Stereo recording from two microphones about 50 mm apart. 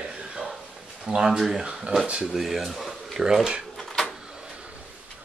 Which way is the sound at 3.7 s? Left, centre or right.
Centre.